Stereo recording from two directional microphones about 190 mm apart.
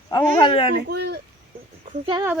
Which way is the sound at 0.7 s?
60° right (ahead or behind).